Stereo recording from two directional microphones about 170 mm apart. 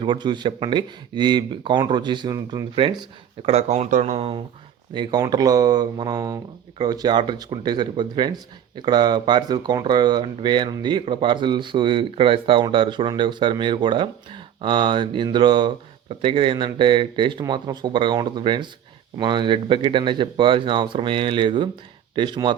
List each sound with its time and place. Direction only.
0.0 s speech: 25° right (ahead or behind)
3.4 s speech: 40° right (ahead or behind)
4.9 s speech: 25° right (ahead or behind)